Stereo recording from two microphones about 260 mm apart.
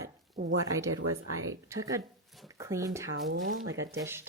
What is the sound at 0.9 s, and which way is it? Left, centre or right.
Speech, right.